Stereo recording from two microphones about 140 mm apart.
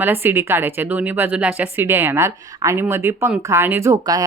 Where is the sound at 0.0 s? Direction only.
15° right (ahead or behind).